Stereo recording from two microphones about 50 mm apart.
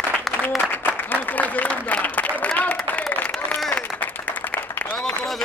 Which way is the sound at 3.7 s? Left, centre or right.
Left.